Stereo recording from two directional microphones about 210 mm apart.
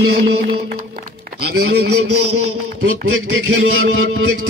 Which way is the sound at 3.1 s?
65° right (ahead or behind).